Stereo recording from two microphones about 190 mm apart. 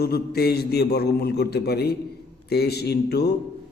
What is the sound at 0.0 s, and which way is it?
A man's voice, 55° left (ahead or behind).